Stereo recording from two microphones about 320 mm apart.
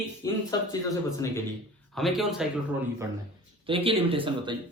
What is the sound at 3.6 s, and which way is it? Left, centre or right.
Speech, centre.